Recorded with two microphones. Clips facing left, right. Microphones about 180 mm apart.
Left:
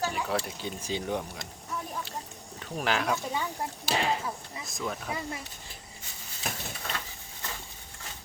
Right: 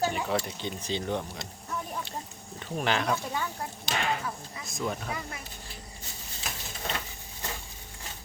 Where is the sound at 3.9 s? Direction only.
30° left (ahead or behind).